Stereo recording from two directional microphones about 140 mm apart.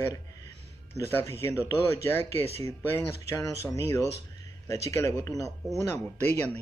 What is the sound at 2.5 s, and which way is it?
Speech, 50° right (ahead or behind).